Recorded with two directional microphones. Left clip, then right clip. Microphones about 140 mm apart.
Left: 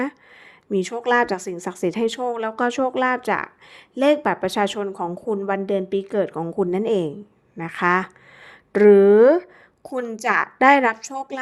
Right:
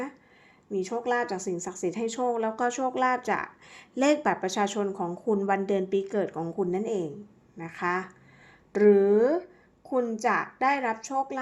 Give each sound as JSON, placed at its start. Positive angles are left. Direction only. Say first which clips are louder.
{"t": 0.7, "sound": "a woman's voice", "louder": "left 8 dB", "side_deg": 80}
{"t": 5.4, "sound": "a woman's voice", "louder": "left 5 dB", "side_deg": 25}